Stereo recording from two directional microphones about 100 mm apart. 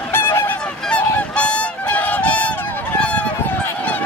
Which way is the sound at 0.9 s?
10° left (ahead or behind).